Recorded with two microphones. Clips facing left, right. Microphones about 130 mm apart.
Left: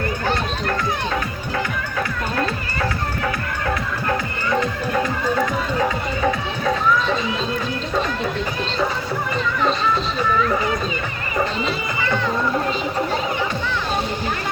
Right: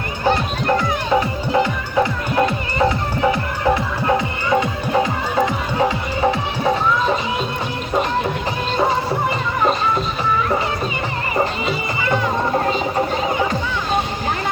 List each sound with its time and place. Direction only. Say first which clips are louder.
0.3 s music: right 8 dB; 20° right (ahead or behind)